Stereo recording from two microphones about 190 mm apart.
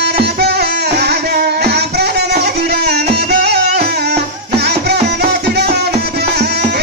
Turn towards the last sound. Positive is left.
turn(degrees=-60)  # may be behind; listen again after turning